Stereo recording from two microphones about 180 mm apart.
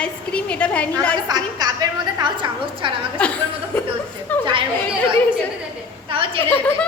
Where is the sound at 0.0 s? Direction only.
5° left (ahead or behind).